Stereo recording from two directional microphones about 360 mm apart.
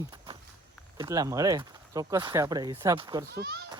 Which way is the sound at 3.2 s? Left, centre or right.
Right.